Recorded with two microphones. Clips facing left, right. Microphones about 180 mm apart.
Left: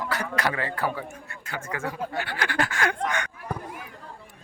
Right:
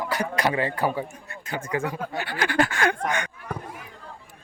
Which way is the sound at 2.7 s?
30° right (ahead or behind).